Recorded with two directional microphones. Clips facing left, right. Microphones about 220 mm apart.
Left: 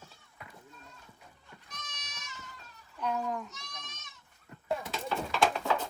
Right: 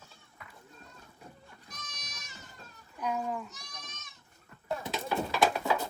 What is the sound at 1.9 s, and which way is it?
Goat, 35° right (ahead or behind).